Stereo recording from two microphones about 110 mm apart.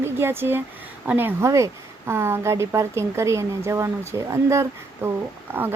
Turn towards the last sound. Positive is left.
turn(degrees=-20)  # may be behind; listen again after turning